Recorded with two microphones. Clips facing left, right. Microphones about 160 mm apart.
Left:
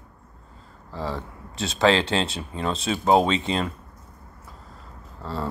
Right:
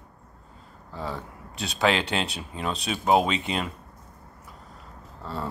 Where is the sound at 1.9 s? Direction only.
30° left (ahead or behind).